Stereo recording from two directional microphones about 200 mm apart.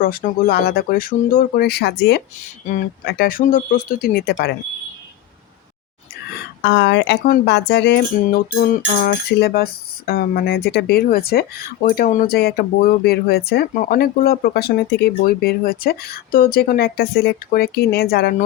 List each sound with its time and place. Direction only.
0.0 s speech: 45° left (ahead or behind)
2.6 s speech: 45° left (ahead or behind)
6.6 s speech: 65° left (ahead or behind)